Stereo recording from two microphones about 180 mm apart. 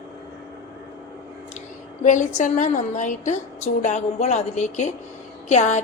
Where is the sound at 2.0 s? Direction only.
45° left (ahead or behind).